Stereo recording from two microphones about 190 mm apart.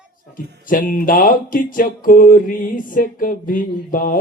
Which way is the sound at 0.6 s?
45° left (ahead or behind).